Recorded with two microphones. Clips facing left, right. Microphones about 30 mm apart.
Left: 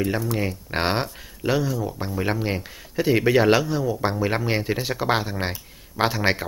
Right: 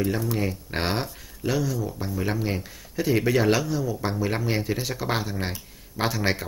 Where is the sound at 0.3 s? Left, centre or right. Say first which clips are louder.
Left 2 dB; centre.